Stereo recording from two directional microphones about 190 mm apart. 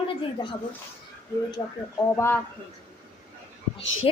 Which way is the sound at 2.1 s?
15° left (ahead or behind).